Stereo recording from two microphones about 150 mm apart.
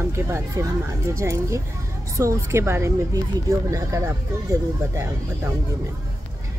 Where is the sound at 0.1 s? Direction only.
20° right (ahead or behind).